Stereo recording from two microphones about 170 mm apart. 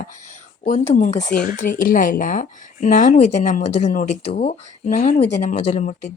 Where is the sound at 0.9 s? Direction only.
45° left (ahead or behind).